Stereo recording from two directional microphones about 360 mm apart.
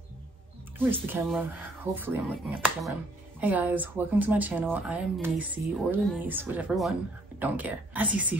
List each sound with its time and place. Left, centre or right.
0.7 s speech: centre